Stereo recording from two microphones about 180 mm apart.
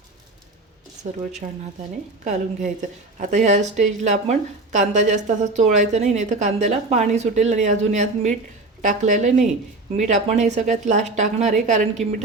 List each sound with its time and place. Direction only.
2.2 s a woman's voice: 45° right (ahead or behind)